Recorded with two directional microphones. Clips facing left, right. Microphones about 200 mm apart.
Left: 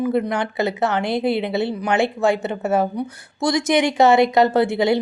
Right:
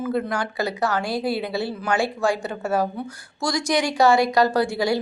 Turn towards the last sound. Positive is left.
turn(degrees=20)  # may be behind; listen again after turning